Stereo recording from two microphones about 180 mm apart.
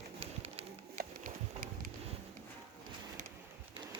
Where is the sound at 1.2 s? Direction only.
50° right (ahead or behind).